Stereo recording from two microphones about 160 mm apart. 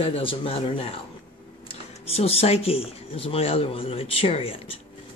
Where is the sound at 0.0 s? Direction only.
35° left (ahead or behind).